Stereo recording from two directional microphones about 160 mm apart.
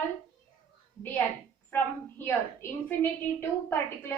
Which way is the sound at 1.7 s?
15° left (ahead or behind).